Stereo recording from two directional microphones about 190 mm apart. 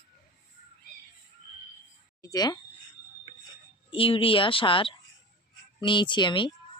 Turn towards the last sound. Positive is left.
turn(degrees=25)  # may be behind; listen again after turning